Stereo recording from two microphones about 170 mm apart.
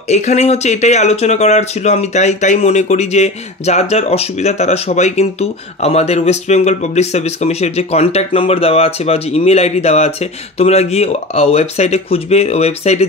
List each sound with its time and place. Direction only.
0.1 s speech: 40° left (ahead or behind)